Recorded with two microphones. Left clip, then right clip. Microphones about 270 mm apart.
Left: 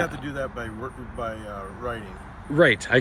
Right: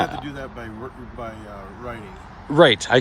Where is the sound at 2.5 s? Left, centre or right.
Centre.